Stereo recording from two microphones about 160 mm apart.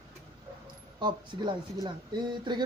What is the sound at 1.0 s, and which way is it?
Speech, 30° right (ahead or behind).